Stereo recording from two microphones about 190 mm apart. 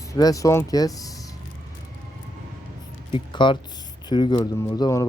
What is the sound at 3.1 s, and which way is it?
Speech, 25° left (ahead or behind).